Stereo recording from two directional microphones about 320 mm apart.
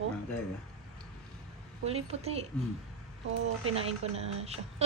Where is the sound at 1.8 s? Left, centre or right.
Centre.